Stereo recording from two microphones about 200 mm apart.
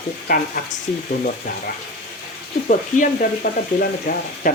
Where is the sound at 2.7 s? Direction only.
40° left (ahead or behind).